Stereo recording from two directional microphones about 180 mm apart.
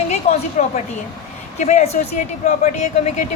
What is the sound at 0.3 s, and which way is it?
Speech, 35° left (ahead or behind).